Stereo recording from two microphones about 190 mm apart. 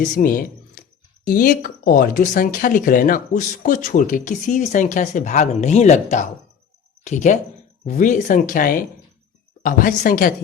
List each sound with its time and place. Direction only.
0.0 s speech: 45° left (ahead or behind)